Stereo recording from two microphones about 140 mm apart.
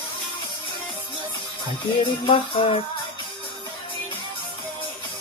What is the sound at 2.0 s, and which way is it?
Music, 40° left (ahead or behind).